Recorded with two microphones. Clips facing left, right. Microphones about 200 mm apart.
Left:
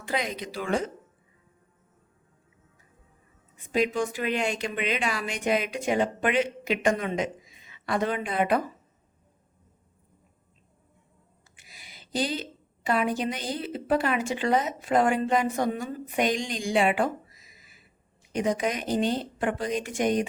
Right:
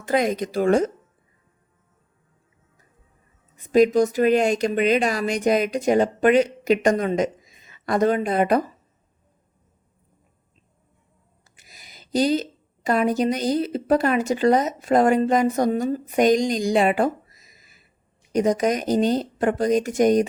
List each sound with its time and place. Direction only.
0.0 s speech: 45° right (ahead or behind)
3.7 s speech: 40° right (ahead or behind)
11.5 s a woman's voice: 40° right (ahead or behind)